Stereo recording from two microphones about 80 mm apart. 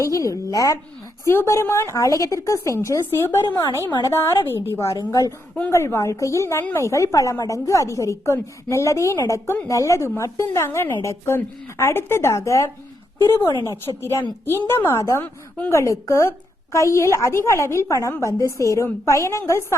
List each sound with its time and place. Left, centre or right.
0.0 s a woman's voice: left
1.2 s a woman's voice: left
4.7 s a woman's voice: left
5.7 s a woman's voice: left